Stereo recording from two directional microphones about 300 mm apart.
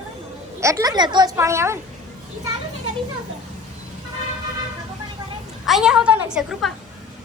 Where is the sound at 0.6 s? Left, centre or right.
Centre.